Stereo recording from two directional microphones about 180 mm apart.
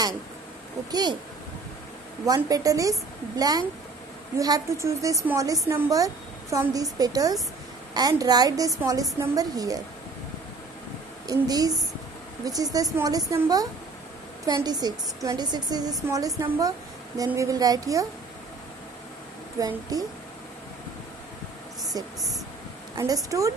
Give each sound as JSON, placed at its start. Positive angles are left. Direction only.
{"t": 2.2, "sound": "a woman's voice", "side_deg": -20}
{"t": 11.2, "sound": "a woman's voice", "side_deg": -20}
{"t": 12.7, "sound": "a woman's voice", "side_deg": -20}
{"t": 19.6, "sound": "a woman's voice", "side_deg": -20}
{"t": 21.9, "sound": "a woman's voice", "side_deg": -20}